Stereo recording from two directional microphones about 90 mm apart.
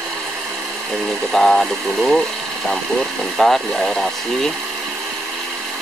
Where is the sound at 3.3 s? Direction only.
Centre (ahead or behind).